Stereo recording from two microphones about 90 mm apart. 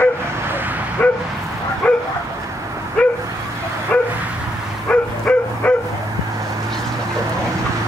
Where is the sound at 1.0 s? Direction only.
15° left (ahead or behind).